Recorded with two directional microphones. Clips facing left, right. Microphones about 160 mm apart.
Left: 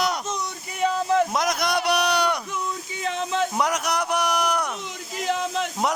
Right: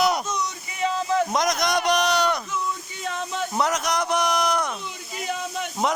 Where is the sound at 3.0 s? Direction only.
90° left.